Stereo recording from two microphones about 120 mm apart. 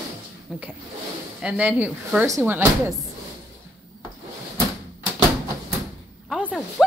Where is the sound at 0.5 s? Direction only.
5° right (ahead or behind).